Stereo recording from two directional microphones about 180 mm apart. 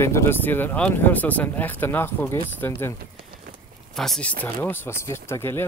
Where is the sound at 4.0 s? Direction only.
5° left (ahead or behind).